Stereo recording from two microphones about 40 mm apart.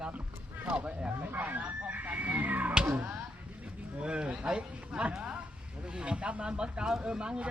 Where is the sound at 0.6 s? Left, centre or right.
Right.